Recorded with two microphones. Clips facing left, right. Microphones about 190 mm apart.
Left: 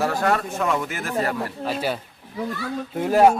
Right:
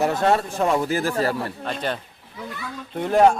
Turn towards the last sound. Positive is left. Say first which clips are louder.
# even
turn(degrees=5)  # may be behind; listen again after turning